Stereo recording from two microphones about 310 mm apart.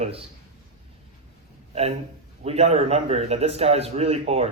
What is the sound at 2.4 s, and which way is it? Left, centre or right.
A man's voice, centre.